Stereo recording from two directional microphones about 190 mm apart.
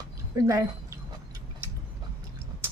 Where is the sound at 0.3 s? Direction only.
20° right (ahead or behind).